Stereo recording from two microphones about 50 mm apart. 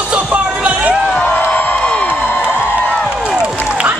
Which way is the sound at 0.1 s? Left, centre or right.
Right.